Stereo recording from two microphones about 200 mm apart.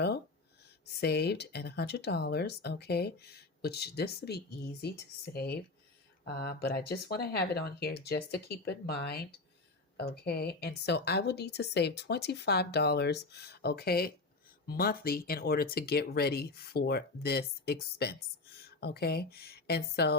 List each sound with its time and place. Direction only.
1.0 s a woman's voice: 55° left (ahead or behind)